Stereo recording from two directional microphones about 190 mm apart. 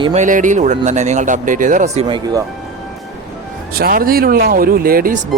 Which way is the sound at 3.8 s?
50° right (ahead or behind).